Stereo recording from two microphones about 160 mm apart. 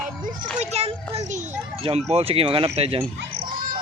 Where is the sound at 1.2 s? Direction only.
50° right (ahead or behind).